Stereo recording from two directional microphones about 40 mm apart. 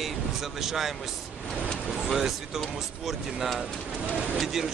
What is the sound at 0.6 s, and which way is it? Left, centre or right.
Speech, centre.